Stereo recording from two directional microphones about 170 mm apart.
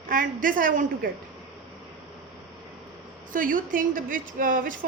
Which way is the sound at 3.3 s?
50° right (ahead or behind).